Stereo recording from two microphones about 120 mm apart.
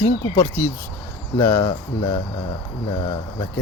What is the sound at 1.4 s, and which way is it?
Speech, 25° left (ahead or behind).